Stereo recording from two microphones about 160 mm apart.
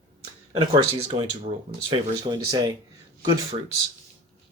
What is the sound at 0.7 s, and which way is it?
A man's voice, 30° right (ahead or behind).